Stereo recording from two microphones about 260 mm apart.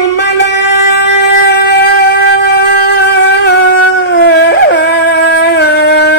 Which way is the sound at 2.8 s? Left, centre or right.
Left.